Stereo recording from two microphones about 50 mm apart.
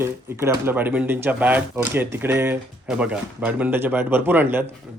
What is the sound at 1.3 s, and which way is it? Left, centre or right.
Speech, right.